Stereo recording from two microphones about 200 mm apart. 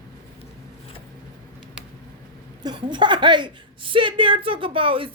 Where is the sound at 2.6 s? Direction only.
25° right (ahead or behind).